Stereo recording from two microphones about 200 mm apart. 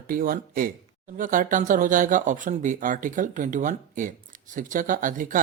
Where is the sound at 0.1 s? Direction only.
45° right (ahead or behind).